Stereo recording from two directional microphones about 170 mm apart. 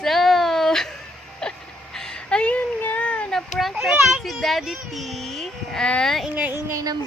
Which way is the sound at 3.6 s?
Centre (ahead or behind).